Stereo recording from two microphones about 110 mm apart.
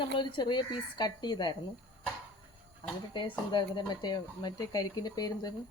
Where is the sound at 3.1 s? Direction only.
45° left (ahead or behind).